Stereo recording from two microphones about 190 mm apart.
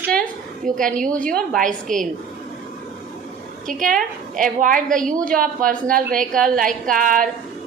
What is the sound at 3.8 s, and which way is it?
A woman's voice, 45° right (ahead or behind).